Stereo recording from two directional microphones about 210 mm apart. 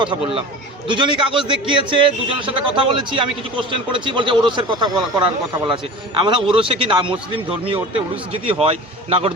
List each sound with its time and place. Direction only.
0.0 s speech: 25° right (ahead or behind)